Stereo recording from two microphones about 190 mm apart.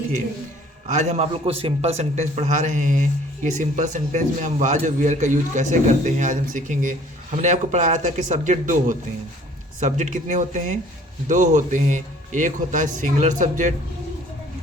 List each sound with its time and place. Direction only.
0.9 s a man's voice: 35° right (ahead or behind)